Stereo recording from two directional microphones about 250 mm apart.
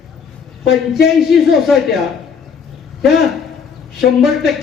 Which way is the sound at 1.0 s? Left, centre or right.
Centre.